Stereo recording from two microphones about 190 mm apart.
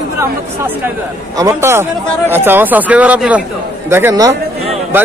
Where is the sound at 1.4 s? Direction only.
15° right (ahead or behind).